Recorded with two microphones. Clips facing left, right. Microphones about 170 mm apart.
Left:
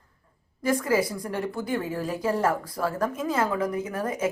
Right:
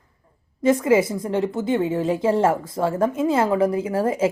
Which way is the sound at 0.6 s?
25° right (ahead or behind).